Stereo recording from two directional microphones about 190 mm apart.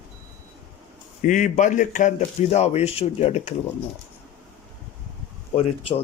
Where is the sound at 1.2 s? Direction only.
40° left (ahead or behind).